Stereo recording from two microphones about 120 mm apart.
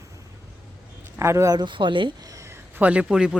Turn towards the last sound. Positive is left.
turn(degrees=-5)  # may be behind; listen again after turning